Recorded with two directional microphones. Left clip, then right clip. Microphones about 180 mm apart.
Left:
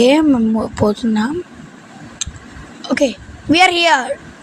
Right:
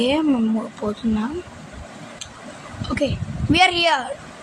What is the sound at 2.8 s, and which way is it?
A woman's voice, 20° left (ahead or behind).